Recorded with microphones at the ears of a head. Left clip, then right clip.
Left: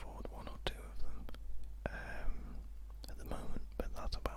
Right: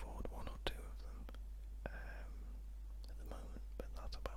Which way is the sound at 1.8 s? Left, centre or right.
Left.